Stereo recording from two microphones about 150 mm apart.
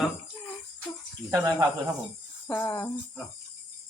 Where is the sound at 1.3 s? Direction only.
20° right (ahead or behind).